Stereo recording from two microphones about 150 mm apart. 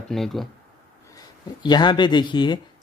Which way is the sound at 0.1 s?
Centre (ahead or behind).